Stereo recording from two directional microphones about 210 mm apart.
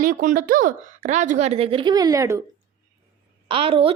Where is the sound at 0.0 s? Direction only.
40° right (ahead or behind); by 2.4 s 15° right (ahead or behind).